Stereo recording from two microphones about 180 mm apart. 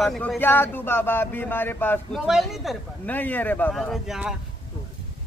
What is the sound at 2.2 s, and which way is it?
Speech, centre (ahead or behind).